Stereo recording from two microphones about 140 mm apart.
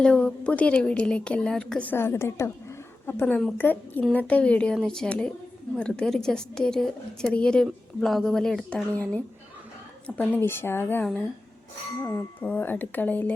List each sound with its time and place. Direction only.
0.0 s a woman's voice: 5° left (ahead or behind)